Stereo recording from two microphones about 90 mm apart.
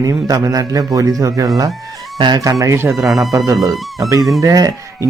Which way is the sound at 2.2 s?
55° right (ahead or behind).